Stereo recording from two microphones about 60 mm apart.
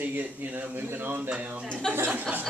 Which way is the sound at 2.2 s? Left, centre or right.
Right.